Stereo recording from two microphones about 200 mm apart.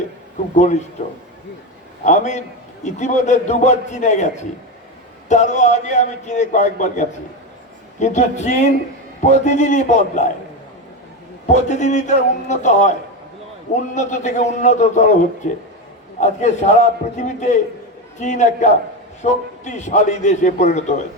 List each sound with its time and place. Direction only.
0.5 s a man's voice: 35° left (ahead or behind)
2.0 s a man's voice: 35° left (ahead or behind)
11.4 s a man's voice: 35° left (ahead or behind)
13.9 s a man's voice: 35° left (ahead or behind)